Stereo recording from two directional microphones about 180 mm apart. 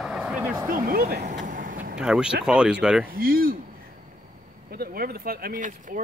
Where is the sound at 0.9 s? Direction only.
55° right (ahead or behind).